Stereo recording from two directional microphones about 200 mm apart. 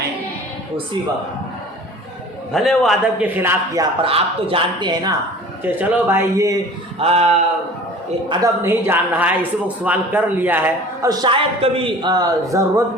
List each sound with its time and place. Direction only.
2.5 s speech: centre (ahead or behind)
4.0 s speech: 25° right (ahead or behind)
5.6 s speech: 10° right (ahead or behind)
7.0 s speech: 30° right (ahead or behind)
8.3 s speech: 15° right (ahead or behind)